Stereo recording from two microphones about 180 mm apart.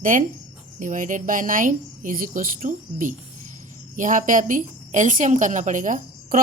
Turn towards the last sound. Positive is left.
turn(degrees=-45)  # may be behind; listen again after turning